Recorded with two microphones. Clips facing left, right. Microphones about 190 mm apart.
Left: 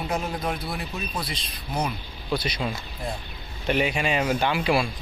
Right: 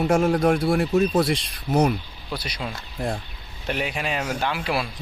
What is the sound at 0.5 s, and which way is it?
Speech, 80° right.